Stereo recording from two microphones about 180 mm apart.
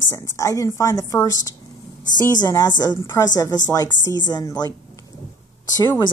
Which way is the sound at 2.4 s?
20° left (ahead or behind).